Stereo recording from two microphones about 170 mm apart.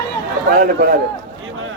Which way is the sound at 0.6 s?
65° right (ahead or behind).